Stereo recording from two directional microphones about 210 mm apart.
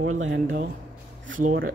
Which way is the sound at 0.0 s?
75° right (ahead or behind).